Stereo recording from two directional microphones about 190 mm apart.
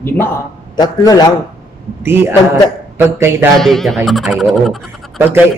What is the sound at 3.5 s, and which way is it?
Speech, centre (ahead or behind).